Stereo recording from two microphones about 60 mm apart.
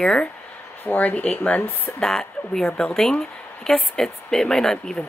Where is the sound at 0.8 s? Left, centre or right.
Left.